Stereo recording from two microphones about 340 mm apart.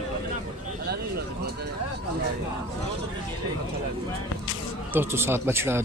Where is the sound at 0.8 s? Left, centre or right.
Right.